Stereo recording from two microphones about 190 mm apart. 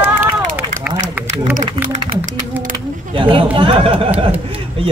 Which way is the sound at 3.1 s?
30° right (ahead or behind).